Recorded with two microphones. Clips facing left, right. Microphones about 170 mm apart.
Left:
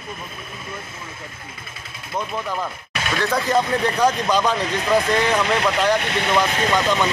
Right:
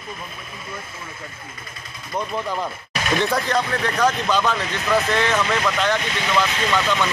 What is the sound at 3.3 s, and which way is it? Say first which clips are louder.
Speech: left 2 dB; 10° left (ahead or behind).